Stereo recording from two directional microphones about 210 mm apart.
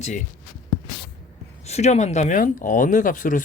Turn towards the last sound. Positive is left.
turn(degrees=40)  # may be behind; listen again after turning